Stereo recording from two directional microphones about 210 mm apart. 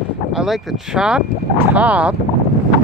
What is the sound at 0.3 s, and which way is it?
Speech, centre (ahead or behind).